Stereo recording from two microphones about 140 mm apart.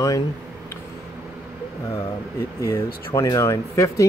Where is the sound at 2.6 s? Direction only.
20° left (ahead or behind).